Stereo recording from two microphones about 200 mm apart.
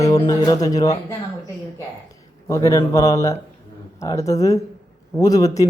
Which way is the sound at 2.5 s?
15° left (ahead or behind).